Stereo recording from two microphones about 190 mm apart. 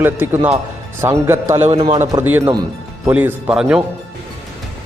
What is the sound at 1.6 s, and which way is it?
Speech, 30° right (ahead or behind).